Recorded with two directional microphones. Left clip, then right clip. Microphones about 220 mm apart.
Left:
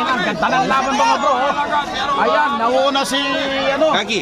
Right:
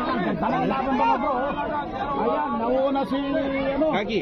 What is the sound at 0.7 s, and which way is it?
Speech, 55° left (ahead or behind).